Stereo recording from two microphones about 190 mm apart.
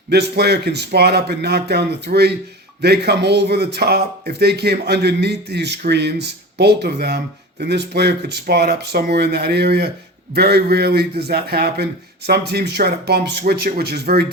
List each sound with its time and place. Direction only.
0.1 s a man's voice: 60° right (ahead or behind)